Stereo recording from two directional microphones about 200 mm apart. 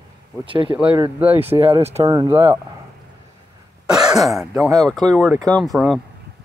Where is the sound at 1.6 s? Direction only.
30° right (ahead or behind).